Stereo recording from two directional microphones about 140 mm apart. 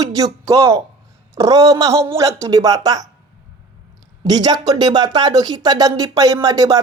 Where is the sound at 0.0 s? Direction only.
25° right (ahead or behind).